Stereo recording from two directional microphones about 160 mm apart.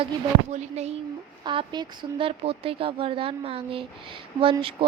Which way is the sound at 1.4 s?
30° right (ahead or behind).